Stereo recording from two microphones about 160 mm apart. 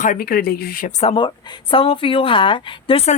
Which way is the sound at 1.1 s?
30° left (ahead or behind).